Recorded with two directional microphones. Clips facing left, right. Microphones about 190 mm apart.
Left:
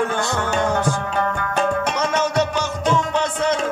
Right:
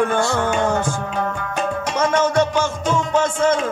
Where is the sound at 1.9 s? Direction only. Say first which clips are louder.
Right 3 dB; 50° right (ahead or behind).